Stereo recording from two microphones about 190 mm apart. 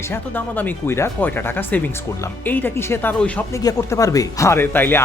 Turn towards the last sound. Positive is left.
turn(degrees=10)  # may be behind; listen again after turning